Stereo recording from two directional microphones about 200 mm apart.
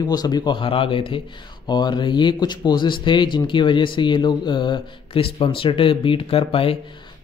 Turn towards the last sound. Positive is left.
turn(degrees=25)  # may be behind; listen again after turning